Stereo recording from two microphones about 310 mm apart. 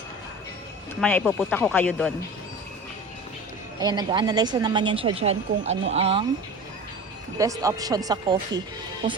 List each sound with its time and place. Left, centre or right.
1.0 s speech: centre
3.8 s speech: centre
7.3 s speech: centre